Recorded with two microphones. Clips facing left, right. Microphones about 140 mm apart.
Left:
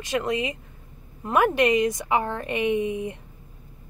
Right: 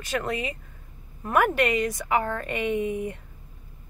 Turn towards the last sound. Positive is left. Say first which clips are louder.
# left 2 dB
turn(degrees=20)  # may be behind; listen again after turning